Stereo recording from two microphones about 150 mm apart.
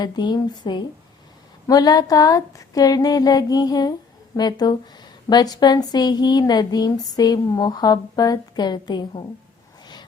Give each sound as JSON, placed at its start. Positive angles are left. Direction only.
{"t": 0.0, "sound": "speech", "side_deg": 30}